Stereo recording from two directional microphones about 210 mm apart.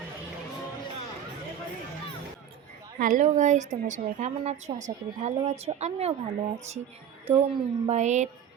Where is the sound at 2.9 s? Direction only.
40° right (ahead or behind).